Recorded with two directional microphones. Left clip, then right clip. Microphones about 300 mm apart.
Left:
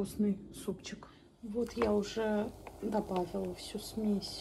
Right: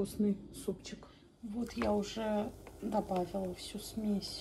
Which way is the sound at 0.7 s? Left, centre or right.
Left.